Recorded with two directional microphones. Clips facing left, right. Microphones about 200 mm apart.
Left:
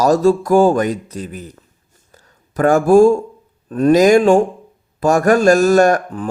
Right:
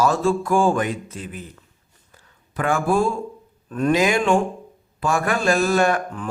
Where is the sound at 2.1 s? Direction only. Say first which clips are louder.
Left 7 dB; 40° left (ahead or behind).